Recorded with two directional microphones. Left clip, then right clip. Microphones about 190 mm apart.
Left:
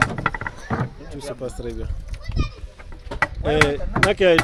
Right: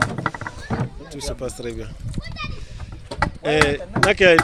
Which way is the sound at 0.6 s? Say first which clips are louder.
Left 1 dB; 30° right (ahead or behind).